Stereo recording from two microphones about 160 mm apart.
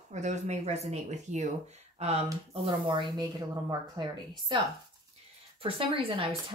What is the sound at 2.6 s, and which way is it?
Speech, 30° right (ahead or behind).